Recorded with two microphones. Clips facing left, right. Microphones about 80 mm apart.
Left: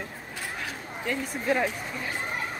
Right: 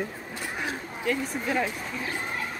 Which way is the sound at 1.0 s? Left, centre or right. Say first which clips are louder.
Right 2 dB; centre.